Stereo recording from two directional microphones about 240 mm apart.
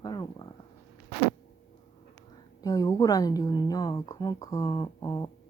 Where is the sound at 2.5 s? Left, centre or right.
Centre.